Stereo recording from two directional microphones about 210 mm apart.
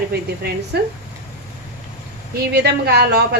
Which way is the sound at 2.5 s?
50° right (ahead or behind).